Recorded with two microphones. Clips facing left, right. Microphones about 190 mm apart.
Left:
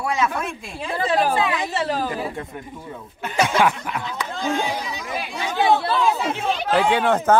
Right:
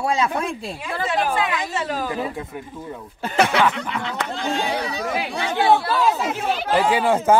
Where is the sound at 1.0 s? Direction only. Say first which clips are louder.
Left 2 dB; 30° left (ahead or behind).